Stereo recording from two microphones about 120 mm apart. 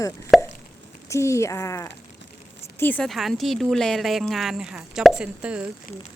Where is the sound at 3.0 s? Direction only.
Centre (ahead or behind).